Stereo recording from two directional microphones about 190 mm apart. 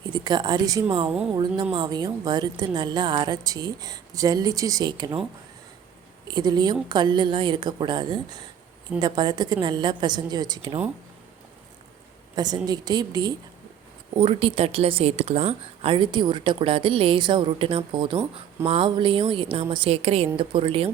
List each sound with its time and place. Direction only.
0.1 s speech: 25° right (ahead or behind)
6.2 s speech: 20° right (ahead or behind)
12.4 s speech: 20° right (ahead or behind)